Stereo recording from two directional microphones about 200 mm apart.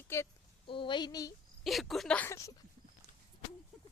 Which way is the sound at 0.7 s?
25° left (ahead or behind).